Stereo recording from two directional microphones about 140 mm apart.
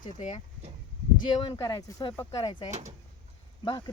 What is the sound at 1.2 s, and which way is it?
Speech, 35° left (ahead or behind).